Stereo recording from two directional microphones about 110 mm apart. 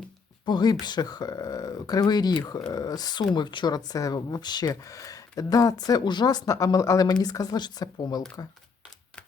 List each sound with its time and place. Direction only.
0.4 s speech: 40° left (ahead or behind)